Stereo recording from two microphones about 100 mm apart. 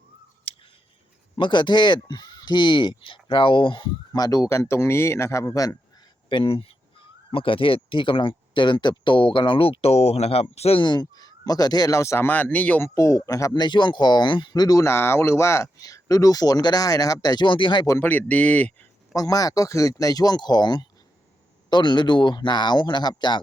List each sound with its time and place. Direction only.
0.5 s scissors: 65° left (ahead or behind)
1.4 s speech: 50° left (ahead or behind)
4.1 s speech: 40° left (ahead or behind)
6.2 s speech: 60° left (ahead or behind); by 10.8 s 85° left
10.8 s speech: 45° left (ahead or behind); by 12.8 s 15° left (ahead or behind)
12.8 s speech: 30° left (ahead or behind)
13.5 s speech: 50° left (ahead or behind)
18.0 s speech: 15° left (ahead or behind)
19.1 s speech: 40° left (ahead or behind)